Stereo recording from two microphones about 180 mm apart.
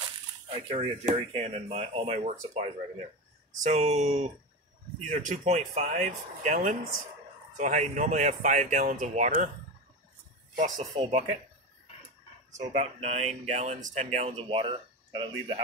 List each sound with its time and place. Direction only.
0.5 s speech: 30° right (ahead or behind)
3.7 s speech: 40° right (ahead or behind)
10.5 s speech: 45° right (ahead or behind)
12.5 s speech: 40° right (ahead or behind)